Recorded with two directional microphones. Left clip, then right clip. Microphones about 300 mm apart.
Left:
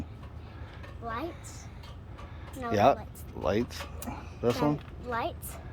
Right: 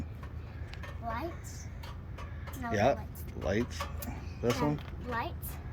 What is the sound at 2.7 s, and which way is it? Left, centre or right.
Speech, centre.